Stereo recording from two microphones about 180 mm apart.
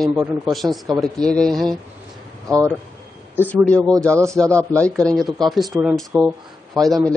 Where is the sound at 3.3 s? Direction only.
10° left (ahead or behind).